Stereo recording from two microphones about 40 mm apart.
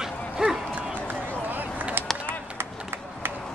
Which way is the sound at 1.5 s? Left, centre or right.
Right.